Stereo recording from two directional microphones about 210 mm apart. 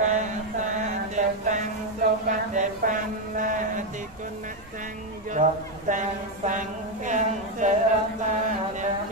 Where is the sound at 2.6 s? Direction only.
40° right (ahead or behind).